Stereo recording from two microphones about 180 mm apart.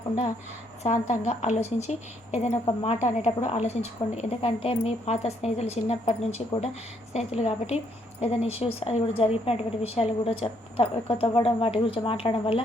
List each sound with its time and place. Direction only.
0.8 s a woman's voice: 40° left (ahead or behind)